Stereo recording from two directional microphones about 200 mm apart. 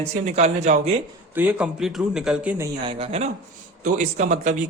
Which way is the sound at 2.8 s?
30° right (ahead or behind).